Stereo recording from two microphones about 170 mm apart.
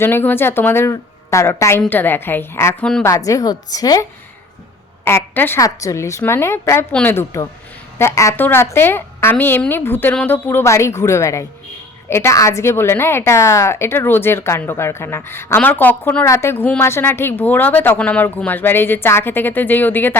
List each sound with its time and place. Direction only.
0.0 s a woman's voice: 10° left (ahead or behind)
5.0 s a woman's voice: 10° left (ahead or behind)